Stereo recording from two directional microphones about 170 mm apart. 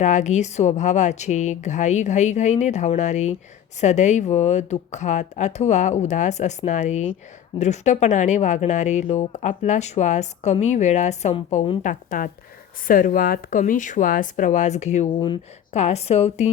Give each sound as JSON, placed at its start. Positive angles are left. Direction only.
{"t": 0.0, "sound": "speech", "side_deg": 45}
{"t": 11.8, "sound": "a woman's voice", "side_deg": 50}